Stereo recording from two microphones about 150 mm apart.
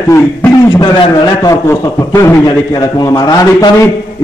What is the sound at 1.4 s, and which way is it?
A man's voice, 20° left (ahead or behind).